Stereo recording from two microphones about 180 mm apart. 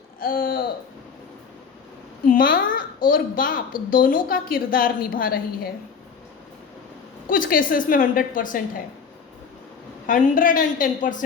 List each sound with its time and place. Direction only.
0.2 s a woman's voice: 55° left (ahead or behind)
2.2 s a woman's voice: 50° left (ahead or behind)
7.3 s a woman's voice: 50° left (ahead or behind)
10.1 s a woman's voice: 50° left (ahead or behind)